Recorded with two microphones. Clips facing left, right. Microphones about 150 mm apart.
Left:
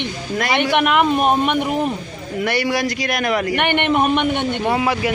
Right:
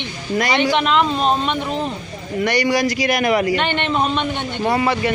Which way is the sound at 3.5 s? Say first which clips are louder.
Left 1 dB; 60° left (ahead or behind).